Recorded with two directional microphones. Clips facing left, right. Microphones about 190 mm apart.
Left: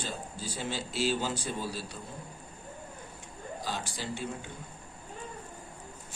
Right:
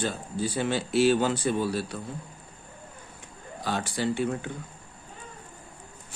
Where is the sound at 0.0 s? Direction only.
60° right (ahead or behind).